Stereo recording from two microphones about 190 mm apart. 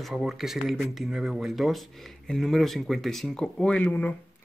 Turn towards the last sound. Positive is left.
turn(degrees=5)  # may be behind; listen again after turning